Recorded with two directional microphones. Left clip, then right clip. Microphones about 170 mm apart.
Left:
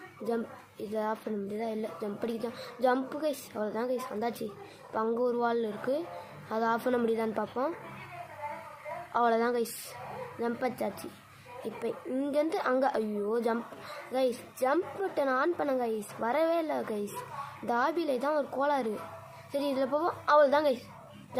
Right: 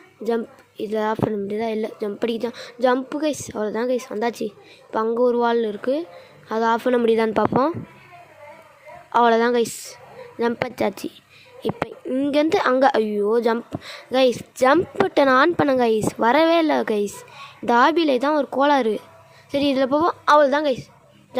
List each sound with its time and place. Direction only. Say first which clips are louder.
0.3 s a woman's voice: right 10 dB; 50° right (ahead or behind)
9.1 s a woman's voice: right 11 dB; 50° right (ahead or behind)
12.1 s a woman's voice: right 11 dB; 50° right (ahead or behind)